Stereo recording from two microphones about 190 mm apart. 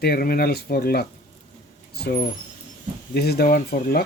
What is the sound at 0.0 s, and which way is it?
Speech, 55° left (ahead or behind).